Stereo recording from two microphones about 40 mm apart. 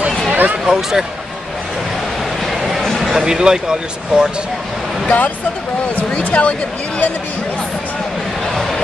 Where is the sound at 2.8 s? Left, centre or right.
Centre.